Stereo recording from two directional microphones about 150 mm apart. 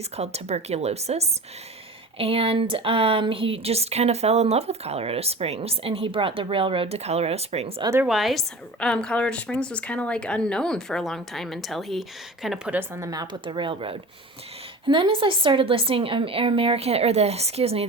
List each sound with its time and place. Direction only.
0.2 s a woman's voice: 45° right (ahead or behind)
7.8 s a woman's voice: 20° right (ahead or behind)
8.0 s a woman's voice: centre (ahead or behind); by 17.8 s 40° right (ahead or behind)